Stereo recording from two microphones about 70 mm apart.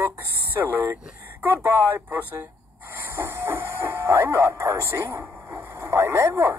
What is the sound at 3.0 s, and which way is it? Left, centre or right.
Hiss, right.